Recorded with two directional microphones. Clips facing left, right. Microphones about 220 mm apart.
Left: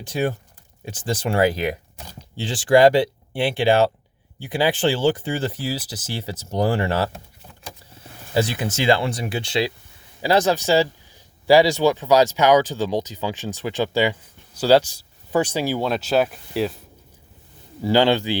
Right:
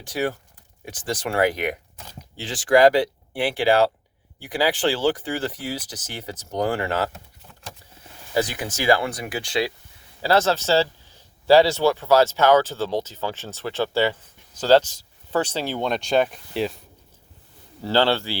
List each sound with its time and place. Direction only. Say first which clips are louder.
0.0 s speech: left 2 dB; 25° left (ahead or behind)
8.3 s speech: left 2 dB; 25° left (ahead or behind); by 16.8 s centre (ahead or behind)
17.8 s speech: left 3 dB; 15° left (ahead or behind)